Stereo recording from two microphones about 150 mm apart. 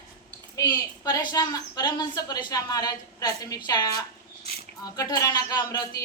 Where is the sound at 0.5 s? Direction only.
25° left (ahead or behind).